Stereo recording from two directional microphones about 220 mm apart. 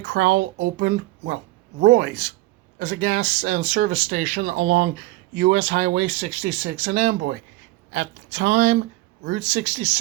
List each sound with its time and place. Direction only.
0.1 s speech: 40° right (ahead or behind)
0.6 s speech: 50° right (ahead or behind)
7.1 s speech: 55° right (ahead or behind)
7.9 s speech: 35° right (ahead or behind)